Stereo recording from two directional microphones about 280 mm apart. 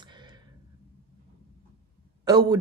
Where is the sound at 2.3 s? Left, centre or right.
Centre.